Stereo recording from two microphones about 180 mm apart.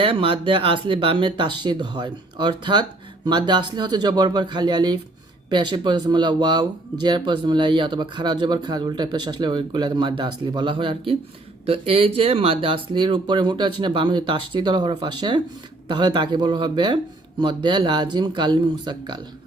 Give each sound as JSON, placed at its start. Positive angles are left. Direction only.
{"t": 0.0, "sound": "speech", "side_deg": -30}